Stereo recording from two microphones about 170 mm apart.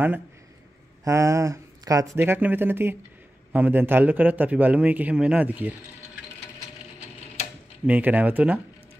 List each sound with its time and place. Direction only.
1.0 s a man's voice: 15° right (ahead or behind)
7.8 s a man's voice: 10° right (ahead or behind)